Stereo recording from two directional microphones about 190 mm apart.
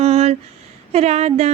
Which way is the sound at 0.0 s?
35° right (ahead or behind).